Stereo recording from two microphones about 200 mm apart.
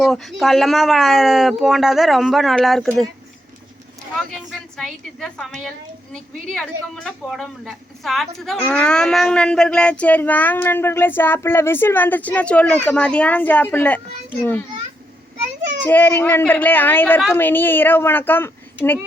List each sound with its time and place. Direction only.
0.0 s speech: centre (ahead or behind)
4.2 s a woman's voice: centre (ahead or behind)
15.8 s speech: 10° left (ahead or behind)